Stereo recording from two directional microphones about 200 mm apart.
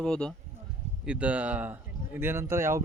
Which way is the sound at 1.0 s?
5° right (ahead or behind).